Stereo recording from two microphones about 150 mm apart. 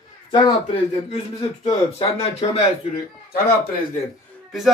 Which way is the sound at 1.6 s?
40° left (ahead or behind).